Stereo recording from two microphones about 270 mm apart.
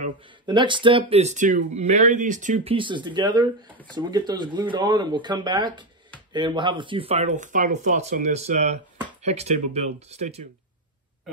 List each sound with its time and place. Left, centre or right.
0.0 s speech: centre